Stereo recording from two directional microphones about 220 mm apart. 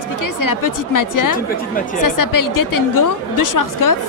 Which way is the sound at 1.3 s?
40° left (ahead or behind).